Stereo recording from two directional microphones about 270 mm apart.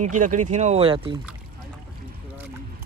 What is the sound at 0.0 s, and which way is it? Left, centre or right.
Speech, right.